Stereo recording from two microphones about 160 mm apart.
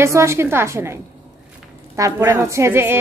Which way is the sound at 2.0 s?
20° right (ahead or behind).